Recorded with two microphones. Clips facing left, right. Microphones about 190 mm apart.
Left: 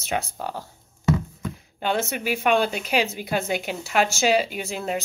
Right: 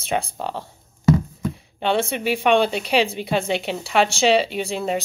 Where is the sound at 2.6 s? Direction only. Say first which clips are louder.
Right 4 dB; 35° right (ahead or behind).